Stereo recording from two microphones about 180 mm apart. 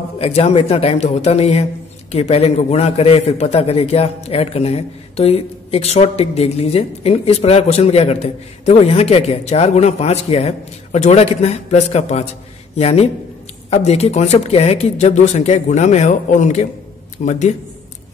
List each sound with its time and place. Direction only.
0.2 s a man's voice: 35° left (ahead or behind)